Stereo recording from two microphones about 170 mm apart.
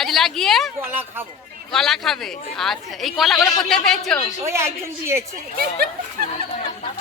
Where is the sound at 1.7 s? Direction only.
Centre (ahead or behind).